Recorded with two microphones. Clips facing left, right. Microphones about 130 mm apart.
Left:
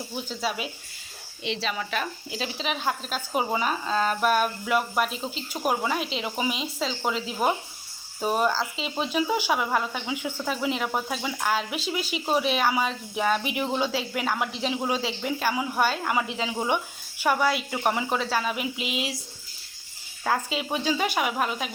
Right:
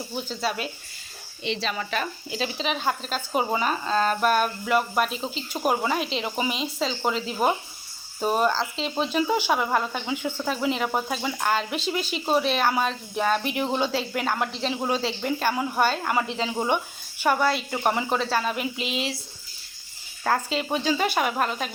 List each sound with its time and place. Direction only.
0.3 s speech: 5° left (ahead or behind)
20.2 s speech: 5° left (ahead or behind)